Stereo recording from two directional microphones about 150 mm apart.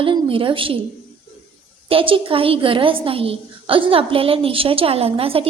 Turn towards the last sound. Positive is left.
turn(degrees=-40)  # may be behind; listen again after turning